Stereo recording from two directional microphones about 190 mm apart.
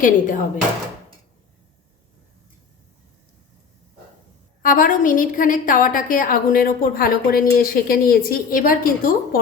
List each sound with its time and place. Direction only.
0.0 s a woman's voice: 45° left (ahead or behind)
4.6 s a woman's voice: 45° left (ahead or behind)